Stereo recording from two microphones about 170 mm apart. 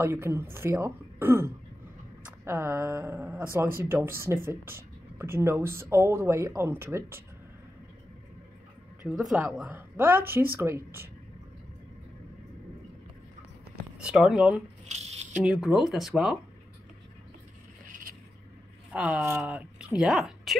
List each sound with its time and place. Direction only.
0.0 s speech: 15° right (ahead or behind)
9.0 s speech: centre (ahead or behind)
13.9 s speech: 5° right (ahead or behind)
14.9 s a sound: 40° right (ahead or behind)
15.4 s speech: centre (ahead or behind)
18.9 s speech: 10° right (ahead or behind)